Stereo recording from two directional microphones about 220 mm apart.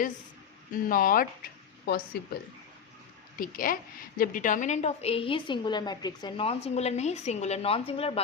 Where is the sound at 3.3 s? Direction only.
40° left (ahead or behind).